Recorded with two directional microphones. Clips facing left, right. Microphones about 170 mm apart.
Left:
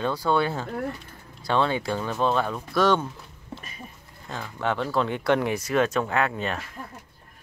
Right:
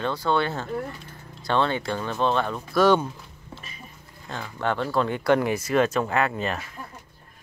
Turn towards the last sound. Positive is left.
turn(degrees=0)  # may be behind; listen again after turning